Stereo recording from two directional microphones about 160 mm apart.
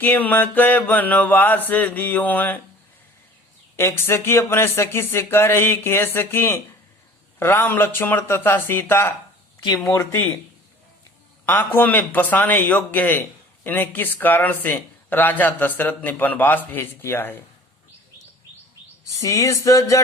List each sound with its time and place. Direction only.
0.0 s speech: 10° left (ahead or behind)
3.8 s speech: 15° left (ahead or behind)
11.4 s speech: 10° left (ahead or behind)
19.0 s a sound: 20° left (ahead or behind)
19.6 s speech: 20° left (ahead or behind)